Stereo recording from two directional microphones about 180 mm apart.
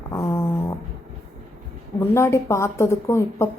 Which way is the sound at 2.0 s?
15° left (ahead or behind).